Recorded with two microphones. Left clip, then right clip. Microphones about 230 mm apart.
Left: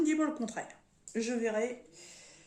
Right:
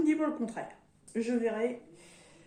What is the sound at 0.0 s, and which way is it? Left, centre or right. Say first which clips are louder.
Speech: right 1 dB; left.